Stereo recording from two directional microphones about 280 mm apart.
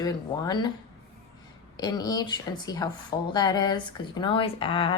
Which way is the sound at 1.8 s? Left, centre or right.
Centre.